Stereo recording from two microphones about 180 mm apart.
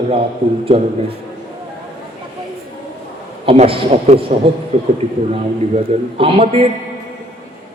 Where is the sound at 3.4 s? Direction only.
30° right (ahead or behind).